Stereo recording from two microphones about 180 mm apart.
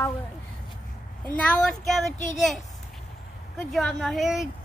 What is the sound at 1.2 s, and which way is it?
Speech, 5° left (ahead or behind).